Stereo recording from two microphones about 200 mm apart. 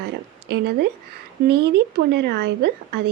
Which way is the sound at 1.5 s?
60° right (ahead or behind).